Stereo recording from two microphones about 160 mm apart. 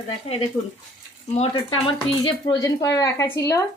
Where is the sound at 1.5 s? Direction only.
30° left (ahead or behind).